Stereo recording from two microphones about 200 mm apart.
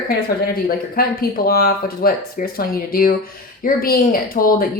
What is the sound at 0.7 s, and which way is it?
Speech, 50° left (ahead or behind).